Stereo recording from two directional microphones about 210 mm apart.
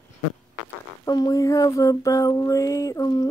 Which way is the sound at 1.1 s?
20° left (ahead or behind).